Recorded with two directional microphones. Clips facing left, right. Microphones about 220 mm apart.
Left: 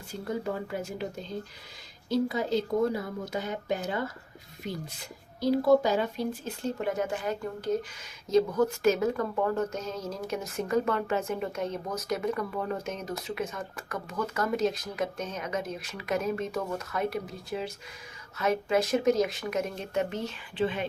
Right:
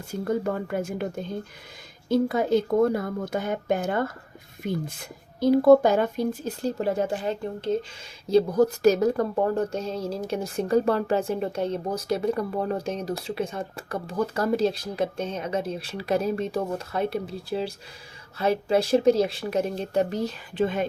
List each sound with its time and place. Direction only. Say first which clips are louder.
0.1 s a woman's voice: right 6 dB; 50° right (ahead or behind)